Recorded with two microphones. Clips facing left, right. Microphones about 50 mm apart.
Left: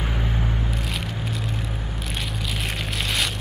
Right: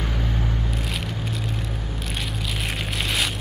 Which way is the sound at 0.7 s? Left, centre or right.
Centre.